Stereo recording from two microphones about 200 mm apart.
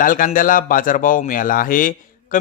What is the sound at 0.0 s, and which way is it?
Speech, 45° left (ahead or behind).